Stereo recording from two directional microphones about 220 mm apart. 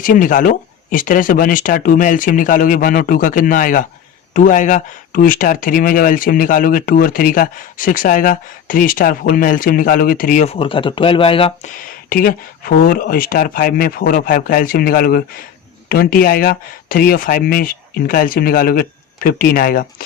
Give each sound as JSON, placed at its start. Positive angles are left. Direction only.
{"t": 0.0, "sound": "speech", "side_deg": 35}
{"t": 12.0, "sound": "speech", "side_deg": 40}